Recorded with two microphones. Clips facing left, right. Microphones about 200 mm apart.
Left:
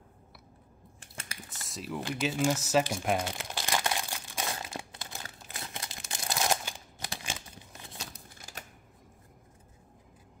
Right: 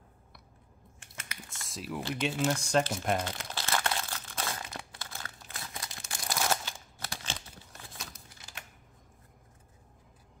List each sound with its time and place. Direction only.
0.9 s biting: 30° left (ahead or behind)
1.5 s typing: centre (ahead or behind)
2.0 s crumpling: 10° left (ahead or behind)
8.4 s typewriter: 45° left (ahead or behind)